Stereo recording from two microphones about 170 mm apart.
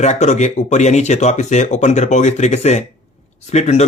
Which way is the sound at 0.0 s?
40° left (ahead or behind).